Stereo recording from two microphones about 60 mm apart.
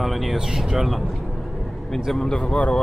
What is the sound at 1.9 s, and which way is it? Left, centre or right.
Speech, centre.